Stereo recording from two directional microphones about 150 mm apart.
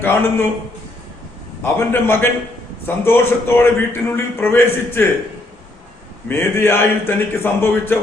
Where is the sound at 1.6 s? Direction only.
15° left (ahead or behind).